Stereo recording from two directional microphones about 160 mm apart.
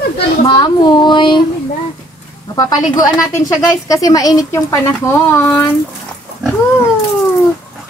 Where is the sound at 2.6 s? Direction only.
20° left (ahead or behind).